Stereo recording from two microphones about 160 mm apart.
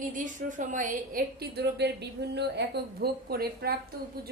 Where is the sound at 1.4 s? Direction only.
90° right.